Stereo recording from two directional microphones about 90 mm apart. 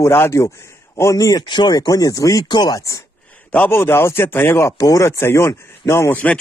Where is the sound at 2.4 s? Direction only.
55° left (ahead or behind).